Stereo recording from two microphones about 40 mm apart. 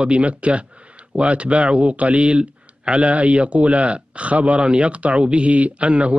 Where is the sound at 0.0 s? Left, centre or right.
Right.